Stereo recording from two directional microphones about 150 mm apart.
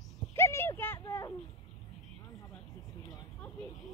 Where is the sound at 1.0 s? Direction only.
20° left (ahead or behind).